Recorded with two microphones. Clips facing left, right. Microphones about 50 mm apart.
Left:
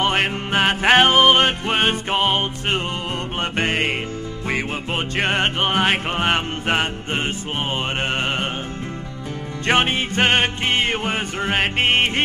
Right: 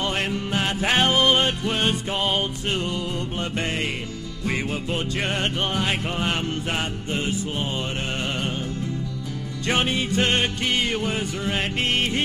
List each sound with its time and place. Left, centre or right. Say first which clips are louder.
0.0 s music: left 5 dB; left
4.9 s music: left 7 dB; left
9.7 s music: left 4 dB; left